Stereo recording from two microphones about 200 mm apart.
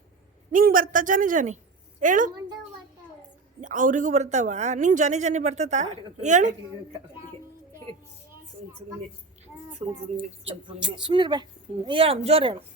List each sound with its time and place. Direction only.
0.5 s speech: 45° right (ahead or behind)
3.6 s speech: 40° right (ahead or behind)
10.4 s speech: 25° right (ahead or behind)